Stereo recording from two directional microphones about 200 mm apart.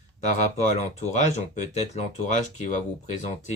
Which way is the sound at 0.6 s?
35° left (ahead or behind).